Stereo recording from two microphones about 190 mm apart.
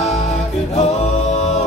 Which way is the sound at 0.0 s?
35° left (ahead or behind).